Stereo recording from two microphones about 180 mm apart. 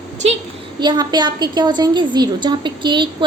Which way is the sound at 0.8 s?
25° right (ahead or behind).